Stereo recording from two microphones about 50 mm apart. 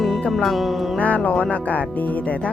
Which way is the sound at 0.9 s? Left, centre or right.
Left.